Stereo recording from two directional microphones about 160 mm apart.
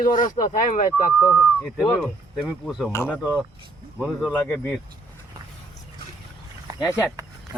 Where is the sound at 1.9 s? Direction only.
5° left (ahead or behind).